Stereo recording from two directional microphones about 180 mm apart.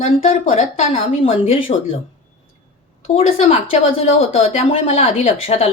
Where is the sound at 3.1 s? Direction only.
35° left (ahead or behind).